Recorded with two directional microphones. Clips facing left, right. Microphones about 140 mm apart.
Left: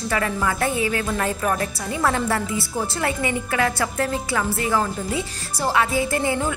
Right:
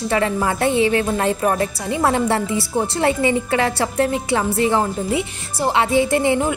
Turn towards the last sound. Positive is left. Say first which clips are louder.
# right 5 dB
turn(degrees=-25)  # may be behind; listen again after turning